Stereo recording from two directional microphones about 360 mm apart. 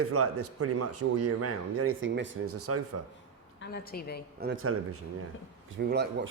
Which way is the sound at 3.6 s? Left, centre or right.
Left.